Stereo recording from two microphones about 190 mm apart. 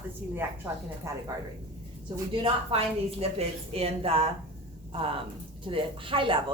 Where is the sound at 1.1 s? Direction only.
15° right (ahead or behind).